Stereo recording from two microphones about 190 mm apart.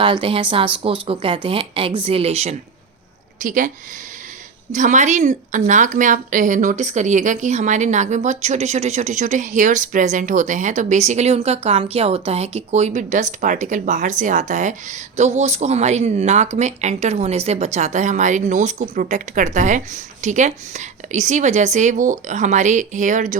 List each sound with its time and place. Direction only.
0.0 s a woman's voice: 25° right (ahead or behind); by 3.7 s 45° right (ahead or behind)
4.7 s a woman's voice: 40° right (ahead or behind)